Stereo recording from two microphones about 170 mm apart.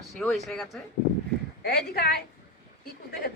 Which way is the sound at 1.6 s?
65° left (ahead or behind).